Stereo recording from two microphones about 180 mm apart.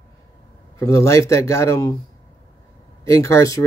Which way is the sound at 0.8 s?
15° left (ahead or behind).